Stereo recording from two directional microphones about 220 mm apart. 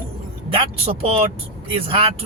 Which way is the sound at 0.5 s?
25° right (ahead or behind).